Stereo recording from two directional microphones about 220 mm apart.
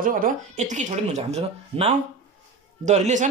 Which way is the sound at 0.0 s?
40° right (ahead or behind).